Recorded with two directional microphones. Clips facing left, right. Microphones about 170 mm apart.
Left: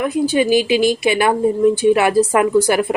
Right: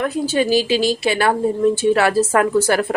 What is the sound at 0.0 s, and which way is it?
A woman's voice, 15° left (ahead or behind).